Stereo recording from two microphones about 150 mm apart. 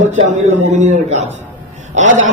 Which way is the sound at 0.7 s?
50° right (ahead or behind).